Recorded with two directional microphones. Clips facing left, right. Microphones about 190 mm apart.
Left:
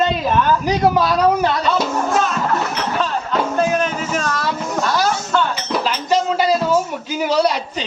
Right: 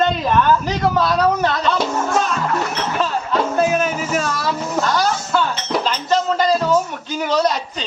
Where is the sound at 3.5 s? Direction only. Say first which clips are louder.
Right 1 dB; 10° right (ahead or behind).